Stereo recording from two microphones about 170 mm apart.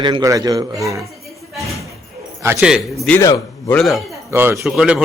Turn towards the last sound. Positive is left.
turn(degrees=-5)  # may be behind; listen again after turning